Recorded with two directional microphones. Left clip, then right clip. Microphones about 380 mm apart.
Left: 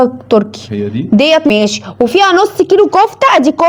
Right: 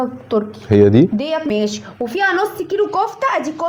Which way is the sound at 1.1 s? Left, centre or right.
Left.